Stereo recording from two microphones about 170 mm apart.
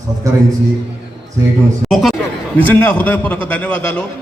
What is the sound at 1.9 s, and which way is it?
A man's voice, centre (ahead or behind).